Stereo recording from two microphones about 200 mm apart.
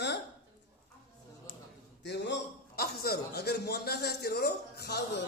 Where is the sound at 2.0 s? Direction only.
60° left (ahead or behind).